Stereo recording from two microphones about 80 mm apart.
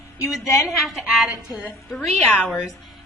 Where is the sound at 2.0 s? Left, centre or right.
Centre.